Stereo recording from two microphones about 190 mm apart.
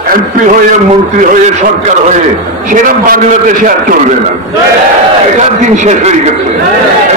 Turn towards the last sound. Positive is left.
turn(degrees=-35)  # may be behind; listen again after turning